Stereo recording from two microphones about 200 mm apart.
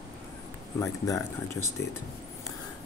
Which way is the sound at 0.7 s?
15° left (ahead or behind).